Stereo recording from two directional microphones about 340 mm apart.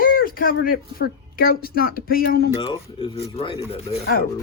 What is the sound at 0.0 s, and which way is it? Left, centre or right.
Speech, left.